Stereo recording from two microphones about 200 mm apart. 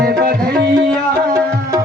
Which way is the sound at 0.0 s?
45° right (ahead or behind).